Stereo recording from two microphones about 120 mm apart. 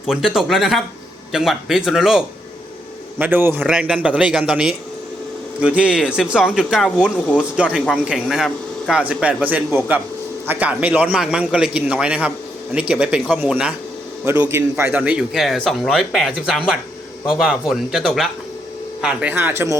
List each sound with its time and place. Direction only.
0.0 s a man's voice: 5° right (ahead or behind)
3.2 s speech: 15° right (ahead or behind)
14.3 s a man's voice: 20° right (ahead or behind); by 18.3 s centre (ahead or behind)
19.0 s speech: 15° right (ahead or behind)